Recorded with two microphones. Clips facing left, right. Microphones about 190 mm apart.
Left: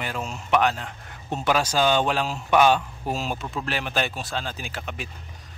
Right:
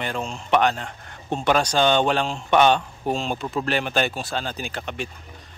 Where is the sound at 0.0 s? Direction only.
5° left (ahead or behind).